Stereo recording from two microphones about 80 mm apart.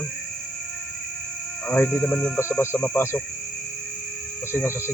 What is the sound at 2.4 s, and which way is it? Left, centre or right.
Speech, left.